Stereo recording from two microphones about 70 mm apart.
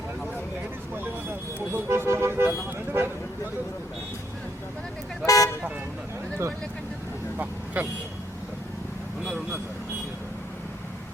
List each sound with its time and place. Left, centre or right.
1.5 s vehicle: right
5.2 s toot: left
7.3 s vehicle: right